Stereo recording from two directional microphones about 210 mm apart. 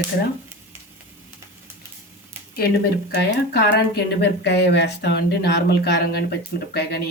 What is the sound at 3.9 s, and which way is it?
Speech, 50° left (ahead or behind).